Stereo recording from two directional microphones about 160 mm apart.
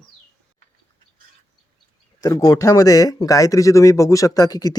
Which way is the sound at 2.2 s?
25° left (ahead or behind).